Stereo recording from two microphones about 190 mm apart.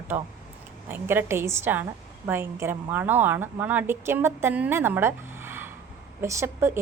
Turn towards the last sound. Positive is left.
turn(degrees=-15)  # may be behind; listen again after turning